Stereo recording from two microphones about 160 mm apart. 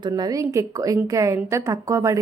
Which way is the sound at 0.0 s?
25° right (ahead or behind).